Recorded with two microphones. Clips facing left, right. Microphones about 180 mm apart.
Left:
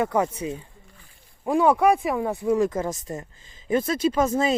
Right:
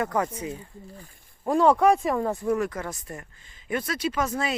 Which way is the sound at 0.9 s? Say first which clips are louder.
Right 10 dB; 40° right (ahead or behind).